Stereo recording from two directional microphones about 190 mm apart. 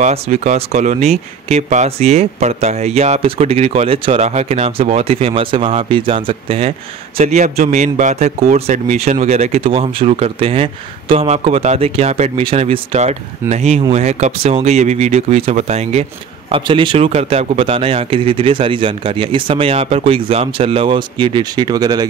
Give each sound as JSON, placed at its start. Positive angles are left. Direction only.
{"t": 0.0, "sound": "a man's voice", "side_deg": -35}